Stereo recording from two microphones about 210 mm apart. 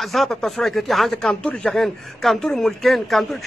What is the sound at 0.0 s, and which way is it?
Speech, centre (ahead or behind).